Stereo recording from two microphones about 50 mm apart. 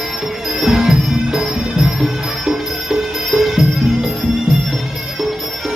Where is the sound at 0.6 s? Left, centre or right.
Centre.